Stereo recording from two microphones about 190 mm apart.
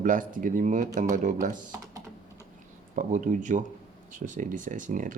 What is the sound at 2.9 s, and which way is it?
Speech, 45° right (ahead or behind).